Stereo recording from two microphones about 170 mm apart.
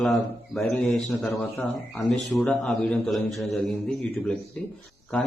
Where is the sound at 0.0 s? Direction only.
Centre (ahead or behind).